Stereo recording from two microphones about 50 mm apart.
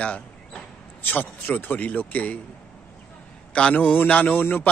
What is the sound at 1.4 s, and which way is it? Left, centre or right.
Speech, left.